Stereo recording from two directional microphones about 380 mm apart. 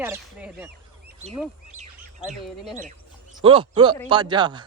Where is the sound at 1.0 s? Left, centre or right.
Centre.